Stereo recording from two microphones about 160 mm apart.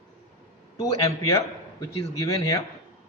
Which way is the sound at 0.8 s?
20° left (ahead or behind).